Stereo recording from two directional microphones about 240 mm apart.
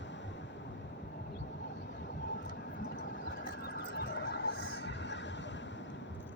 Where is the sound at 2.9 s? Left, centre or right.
Left.